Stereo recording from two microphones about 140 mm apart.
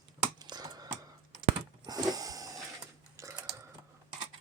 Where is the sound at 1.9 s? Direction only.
25° right (ahead or behind).